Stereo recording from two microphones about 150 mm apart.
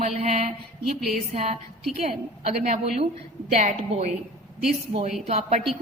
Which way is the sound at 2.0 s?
45° right (ahead or behind).